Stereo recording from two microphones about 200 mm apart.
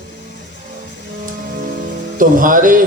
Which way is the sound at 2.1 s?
45° right (ahead or behind).